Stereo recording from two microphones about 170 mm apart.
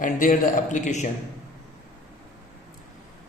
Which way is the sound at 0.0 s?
50° left (ahead or behind).